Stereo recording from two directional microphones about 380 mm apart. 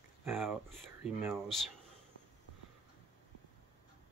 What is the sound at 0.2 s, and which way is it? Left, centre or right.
Speech, centre.